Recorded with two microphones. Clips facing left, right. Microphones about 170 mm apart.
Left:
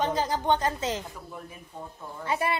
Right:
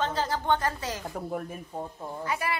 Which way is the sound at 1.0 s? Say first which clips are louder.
Right 8 dB; 50° right (ahead or behind).